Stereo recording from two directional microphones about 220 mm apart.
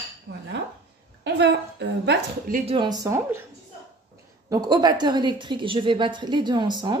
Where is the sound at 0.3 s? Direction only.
55° right (ahead or behind).